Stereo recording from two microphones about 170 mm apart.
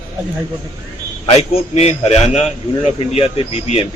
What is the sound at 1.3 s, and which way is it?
A man's voice, 40° left (ahead or behind).